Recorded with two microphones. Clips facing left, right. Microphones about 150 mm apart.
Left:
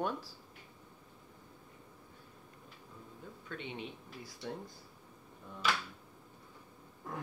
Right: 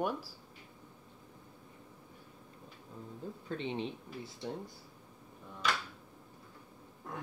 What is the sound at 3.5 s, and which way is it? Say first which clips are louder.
Speech: right 6 dB; 30° right (ahead or behind).